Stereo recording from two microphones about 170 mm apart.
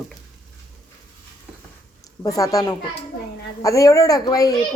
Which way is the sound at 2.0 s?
20° left (ahead or behind).